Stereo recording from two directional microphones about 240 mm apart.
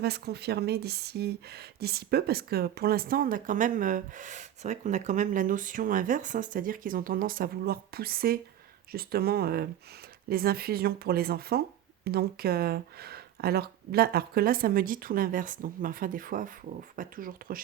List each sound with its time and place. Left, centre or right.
0.0 s speech: right